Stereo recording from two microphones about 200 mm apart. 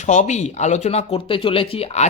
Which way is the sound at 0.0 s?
35° left (ahead or behind).